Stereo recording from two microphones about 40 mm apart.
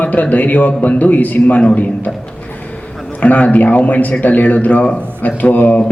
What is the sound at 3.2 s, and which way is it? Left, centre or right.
A man's voice, left.